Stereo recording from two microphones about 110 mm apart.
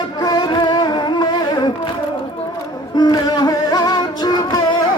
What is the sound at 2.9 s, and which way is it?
Music, 40° left (ahead or behind).